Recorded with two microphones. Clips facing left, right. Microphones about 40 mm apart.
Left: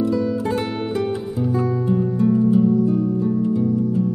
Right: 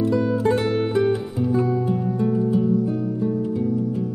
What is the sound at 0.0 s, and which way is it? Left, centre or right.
Music, centre.